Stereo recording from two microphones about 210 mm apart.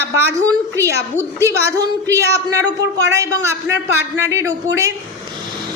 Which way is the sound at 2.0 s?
15° right (ahead or behind).